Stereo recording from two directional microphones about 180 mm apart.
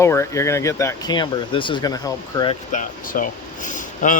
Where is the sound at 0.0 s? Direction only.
15° left (ahead or behind).